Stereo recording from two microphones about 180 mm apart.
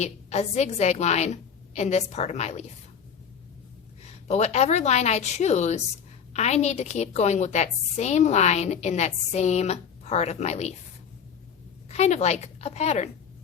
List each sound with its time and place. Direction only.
0.0 s a woman's voice: 35° left (ahead or behind)
4.0 s a woman's voice: 40° left (ahead or behind)
11.9 s a woman's voice: 35° left (ahead or behind)